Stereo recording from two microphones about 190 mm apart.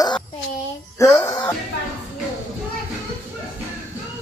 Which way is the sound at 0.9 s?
15° left (ahead or behind).